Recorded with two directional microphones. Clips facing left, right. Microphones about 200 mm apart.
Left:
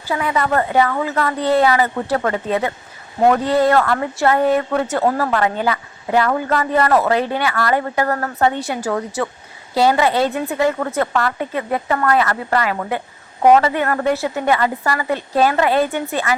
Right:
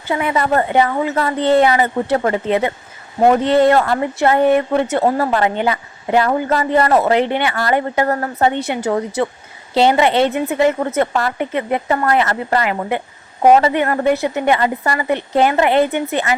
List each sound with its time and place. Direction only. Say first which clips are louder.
0.0 s speech: right 2 dB; 20° right (ahead or behind)